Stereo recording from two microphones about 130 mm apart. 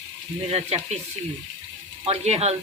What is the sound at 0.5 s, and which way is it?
Speech, 55° right (ahead or behind).